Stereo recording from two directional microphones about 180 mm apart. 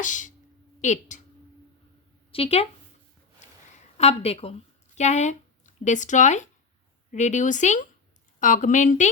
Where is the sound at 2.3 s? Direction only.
35° left (ahead or behind).